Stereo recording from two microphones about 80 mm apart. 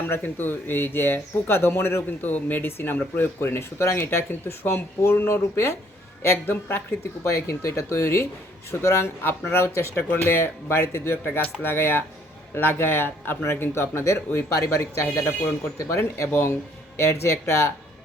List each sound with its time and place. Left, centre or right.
0.1 s speech: left
7.3 s speech: left